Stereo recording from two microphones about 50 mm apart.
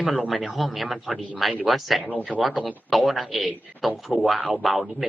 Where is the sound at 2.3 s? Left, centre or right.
Right.